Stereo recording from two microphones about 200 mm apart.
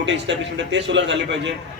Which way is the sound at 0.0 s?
65° right (ahead or behind).